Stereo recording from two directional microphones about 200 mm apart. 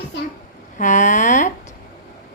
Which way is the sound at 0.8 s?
40° left (ahead or behind).